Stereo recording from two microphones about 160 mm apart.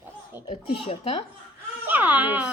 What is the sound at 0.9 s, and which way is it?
Speech, 40° left (ahead or behind).